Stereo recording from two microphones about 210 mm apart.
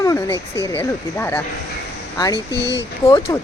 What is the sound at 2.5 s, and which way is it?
Speech, 55° left (ahead or behind).